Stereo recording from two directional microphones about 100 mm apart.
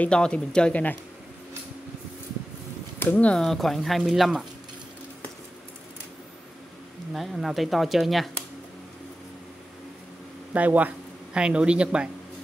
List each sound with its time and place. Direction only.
0.0 s speech: 10° left (ahead or behind)
3.0 s speech: 15° left (ahead or behind); by 4.5 s centre (ahead or behind)
7.2 s speech: centre (ahead or behind)
10.5 s speech: 15° right (ahead or behind)